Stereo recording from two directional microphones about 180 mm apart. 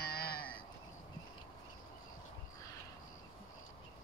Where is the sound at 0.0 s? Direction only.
60° left (ahead or behind).